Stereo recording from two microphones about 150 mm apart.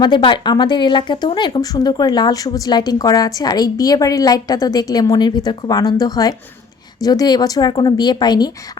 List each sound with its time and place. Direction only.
0.0 s speech: 30° left (ahead or behind)